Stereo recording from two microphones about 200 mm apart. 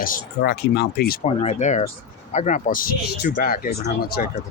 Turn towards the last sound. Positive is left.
turn(degrees=50)  # may be behind; listen again after turning